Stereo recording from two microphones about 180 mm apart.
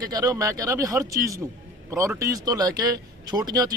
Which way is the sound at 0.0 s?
20° right (ahead or behind).